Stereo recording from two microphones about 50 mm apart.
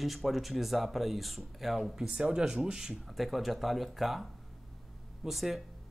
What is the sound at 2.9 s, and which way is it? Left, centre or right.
Speech, centre.